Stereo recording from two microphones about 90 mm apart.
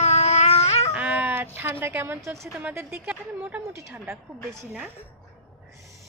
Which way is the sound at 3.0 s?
10° right (ahead or behind).